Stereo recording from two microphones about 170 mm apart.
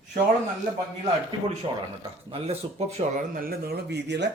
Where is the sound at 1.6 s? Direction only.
30° right (ahead or behind).